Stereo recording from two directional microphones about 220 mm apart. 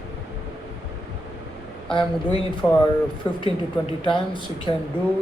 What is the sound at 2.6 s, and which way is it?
Speech, 10° left (ahead or behind).